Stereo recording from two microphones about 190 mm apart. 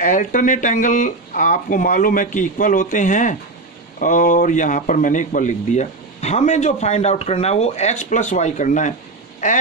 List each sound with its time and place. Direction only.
0.0 s a man's voice: 45° left (ahead or behind)